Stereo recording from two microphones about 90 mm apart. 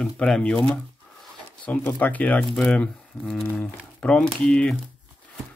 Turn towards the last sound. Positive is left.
turn(degrees=10)  # may be behind; listen again after turning